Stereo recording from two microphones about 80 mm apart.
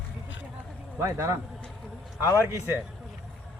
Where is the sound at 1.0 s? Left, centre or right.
Right.